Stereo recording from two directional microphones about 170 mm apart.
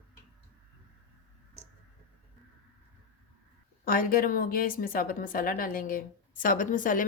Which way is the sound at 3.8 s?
55° left (ahead or behind).